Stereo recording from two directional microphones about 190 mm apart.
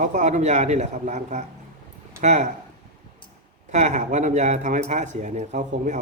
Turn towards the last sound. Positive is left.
turn(degrees=-40)  # may be behind; listen again after turning